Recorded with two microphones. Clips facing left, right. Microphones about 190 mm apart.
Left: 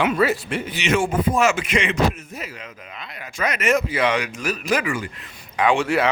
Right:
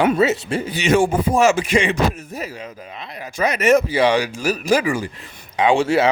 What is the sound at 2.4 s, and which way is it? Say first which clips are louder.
Speech: right 7 dB; 35° right (ahead or behind).